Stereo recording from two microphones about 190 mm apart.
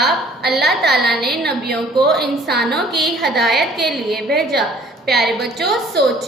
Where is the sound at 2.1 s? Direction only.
55° right (ahead or behind).